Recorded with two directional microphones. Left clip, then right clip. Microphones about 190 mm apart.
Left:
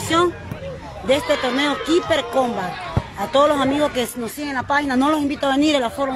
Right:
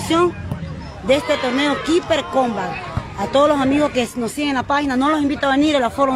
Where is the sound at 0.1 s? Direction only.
5° right (ahead or behind).